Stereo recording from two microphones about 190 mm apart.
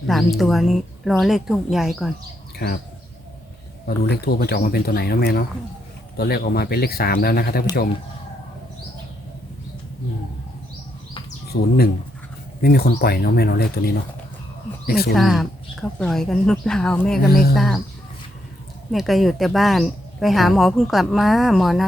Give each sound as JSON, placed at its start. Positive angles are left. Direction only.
{"t": 0.1, "sound": "speech", "side_deg": 0}
{"t": 2.6, "sound": "speech", "side_deg": 55}
{"t": 3.8, "sound": "speech", "side_deg": 55}
{"t": 12.6, "sound": "speech", "side_deg": 55}
{"t": 15.1, "sound": "speech", "side_deg": 0}
{"t": 17.2, "sound": "speech", "side_deg": 50}
{"t": 17.5, "sound": "speech", "side_deg": 0}
{"t": 18.9, "sound": "speech", "side_deg": 0}